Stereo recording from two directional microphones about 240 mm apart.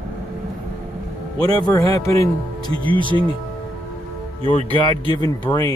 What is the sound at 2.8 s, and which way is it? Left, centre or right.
Speech, right.